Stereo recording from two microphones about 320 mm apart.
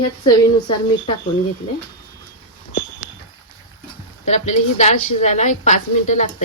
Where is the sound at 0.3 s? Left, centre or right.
Centre.